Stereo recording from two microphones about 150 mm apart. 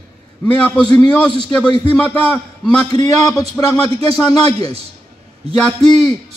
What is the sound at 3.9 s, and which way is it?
Speech, 40° right (ahead or behind).